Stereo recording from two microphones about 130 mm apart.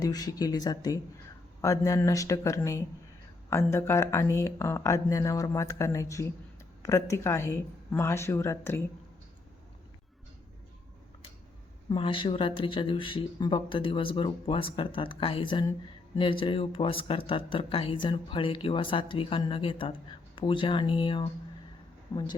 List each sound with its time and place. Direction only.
0.0 s speech: 30° left (ahead or behind)
11.9 s speech: 40° left (ahead or behind)
22.1 s speech: 30° left (ahead or behind)